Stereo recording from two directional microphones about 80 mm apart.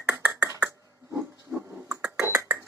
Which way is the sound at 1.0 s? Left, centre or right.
Right.